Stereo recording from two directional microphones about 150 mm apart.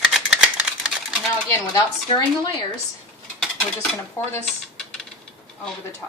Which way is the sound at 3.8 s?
15° left (ahead or behind).